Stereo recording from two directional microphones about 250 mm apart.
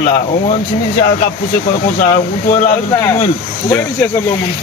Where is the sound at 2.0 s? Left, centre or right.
Left.